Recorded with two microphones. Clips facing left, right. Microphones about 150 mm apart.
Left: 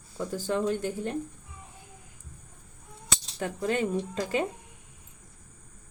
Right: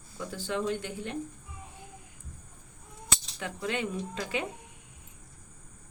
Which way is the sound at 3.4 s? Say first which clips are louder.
Left 5 dB; 40° left (ahead or behind).